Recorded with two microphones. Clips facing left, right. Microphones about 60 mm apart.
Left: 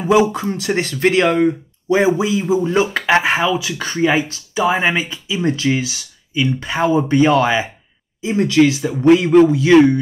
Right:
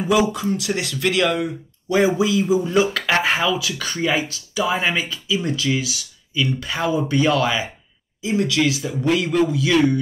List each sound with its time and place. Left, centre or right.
0.0 s speech: left